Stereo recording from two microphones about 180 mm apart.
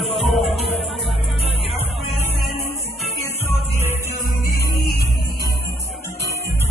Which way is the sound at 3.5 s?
10° right (ahead or behind).